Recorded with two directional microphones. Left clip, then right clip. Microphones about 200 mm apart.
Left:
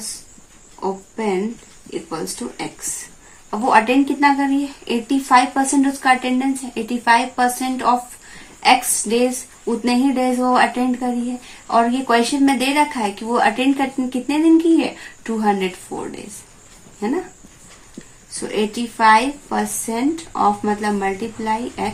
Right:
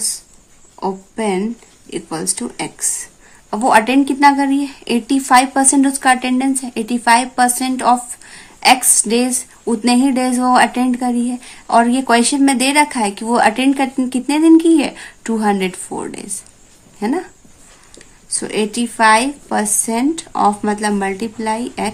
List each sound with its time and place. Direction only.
0.8 s speech: 50° right (ahead or behind)
18.3 s speech: 55° right (ahead or behind)